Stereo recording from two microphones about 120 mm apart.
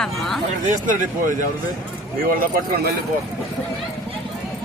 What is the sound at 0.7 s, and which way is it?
Speech, 90° right.